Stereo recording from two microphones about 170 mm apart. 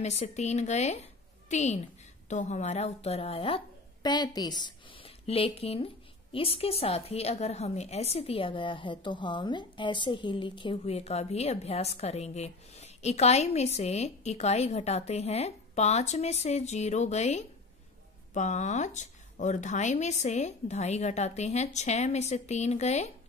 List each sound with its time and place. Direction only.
0.0 s a woman's voice: 40° left (ahead or behind)